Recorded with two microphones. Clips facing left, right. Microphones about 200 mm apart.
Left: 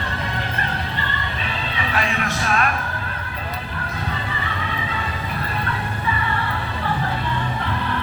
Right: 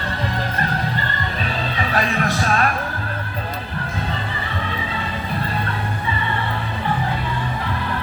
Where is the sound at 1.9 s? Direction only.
35° right (ahead or behind).